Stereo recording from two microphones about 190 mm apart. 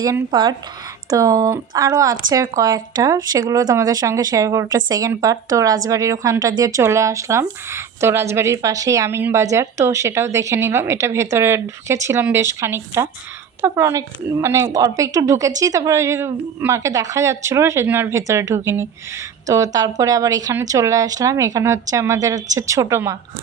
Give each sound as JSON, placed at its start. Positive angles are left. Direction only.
{"t": 0.0, "sound": "speech", "side_deg": -15}